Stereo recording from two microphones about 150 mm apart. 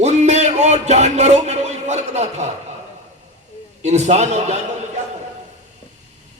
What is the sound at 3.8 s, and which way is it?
Speech, 50° right (ahead or behind).